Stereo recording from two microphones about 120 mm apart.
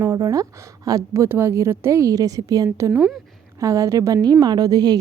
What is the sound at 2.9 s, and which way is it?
Speech, 5° right (ahead or behind).